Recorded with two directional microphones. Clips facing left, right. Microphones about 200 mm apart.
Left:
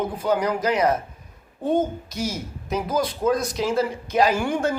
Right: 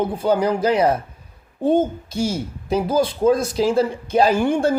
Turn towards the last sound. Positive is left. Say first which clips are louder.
# right 4 dB
turn(degrees=-30)  # may be behind; listen again after turning